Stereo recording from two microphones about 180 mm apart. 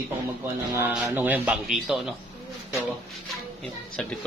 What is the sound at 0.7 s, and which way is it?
Speech, 10° right (ahead or behind).